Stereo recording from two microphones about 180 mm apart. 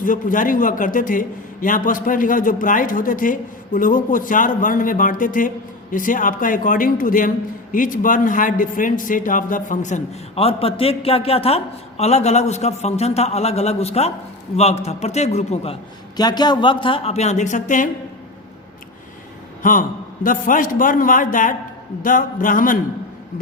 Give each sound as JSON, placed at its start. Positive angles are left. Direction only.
{"t": 0.0, "sound": "a man's voice", "side_deg": 50}
{"t": 16.1, "sound": "a man's voice", "side_deg": 25}
{"t": 20.2, "sound": "a man's voice", "side_deg": 50}